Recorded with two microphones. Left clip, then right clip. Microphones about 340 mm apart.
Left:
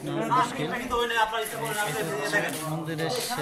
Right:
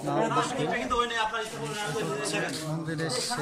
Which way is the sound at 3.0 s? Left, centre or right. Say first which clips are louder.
Left 2 dB; centre.